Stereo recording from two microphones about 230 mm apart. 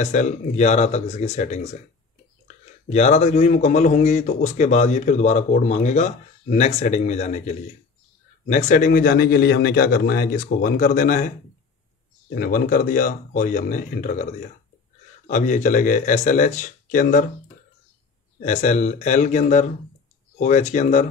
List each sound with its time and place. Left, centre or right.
0.0 s speech: left
12.4 s speech: left
15.2 s speech: left
18.4 s speech: left